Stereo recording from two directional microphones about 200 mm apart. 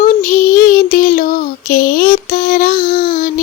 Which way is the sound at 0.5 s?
45° left (ahead or behind).